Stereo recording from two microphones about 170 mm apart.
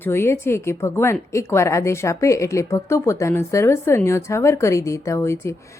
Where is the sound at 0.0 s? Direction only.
15° left (ahead or behind).